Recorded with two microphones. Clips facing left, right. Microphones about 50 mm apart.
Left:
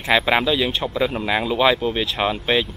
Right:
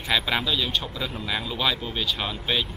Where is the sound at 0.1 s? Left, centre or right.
Left.